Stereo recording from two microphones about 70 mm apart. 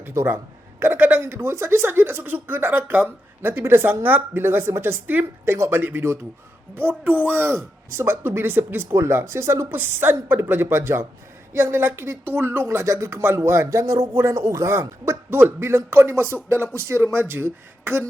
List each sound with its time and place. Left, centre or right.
0.0 s speech: right
5.5 s speech: right
5.8 s speech: right
7.5 s speech: right